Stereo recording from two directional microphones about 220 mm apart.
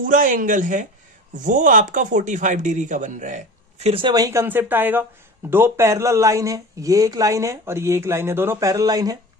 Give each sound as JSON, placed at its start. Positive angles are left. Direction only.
{"t": 0.0, "sound": "speech", "side_deg": -35}